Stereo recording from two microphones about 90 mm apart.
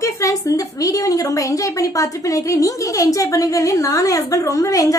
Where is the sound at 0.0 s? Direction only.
35° left (ahead or behind).